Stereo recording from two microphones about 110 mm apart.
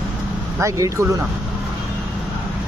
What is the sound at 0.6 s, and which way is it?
Speech, 30° right (ahead or behind).